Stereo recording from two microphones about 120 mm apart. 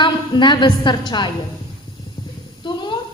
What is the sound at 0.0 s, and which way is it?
A woman's voice, 40° left (ahead or behind).